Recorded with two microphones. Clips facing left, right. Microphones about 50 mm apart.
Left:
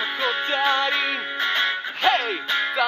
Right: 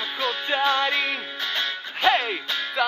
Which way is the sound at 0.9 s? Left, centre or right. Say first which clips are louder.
Left 1 dB; centre.